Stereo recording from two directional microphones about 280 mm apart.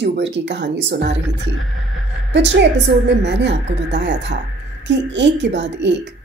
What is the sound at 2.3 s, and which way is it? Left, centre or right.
Speech, right.